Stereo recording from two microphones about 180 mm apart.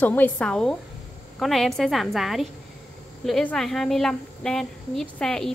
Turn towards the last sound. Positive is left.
turn(degrees=5)  # may be behind; listen again after turning